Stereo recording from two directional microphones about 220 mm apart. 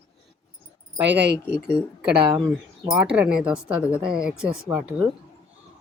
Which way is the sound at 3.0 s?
5° right (ahead or behind).